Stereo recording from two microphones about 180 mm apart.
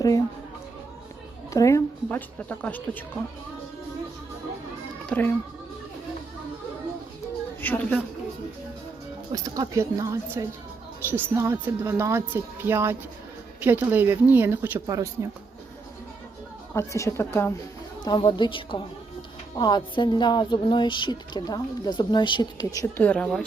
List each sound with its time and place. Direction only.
1.5 s a woman's voice: 15° left (ahead or behind)
5.0 s speech: 10° left (ahead or behind)
7.6 s a woman's voice: 10° left (ahead or behind)
9.3 s speech: 20° right (ahead or behind)
16.7 s a woman's voice: 15° left (ahead or behind)
18.0 s a woman's voice: 25° left (ahead or behind)
23.0 s a woman's voice: 5° left (ahead or behind)